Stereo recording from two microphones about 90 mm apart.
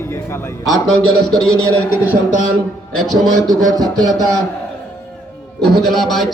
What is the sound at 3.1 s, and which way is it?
Speech, 5° left (ahead or behind).